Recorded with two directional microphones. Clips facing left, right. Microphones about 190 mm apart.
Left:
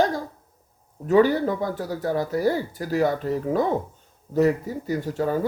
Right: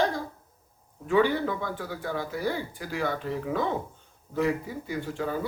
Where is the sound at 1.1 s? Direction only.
40° left (ahead or behind).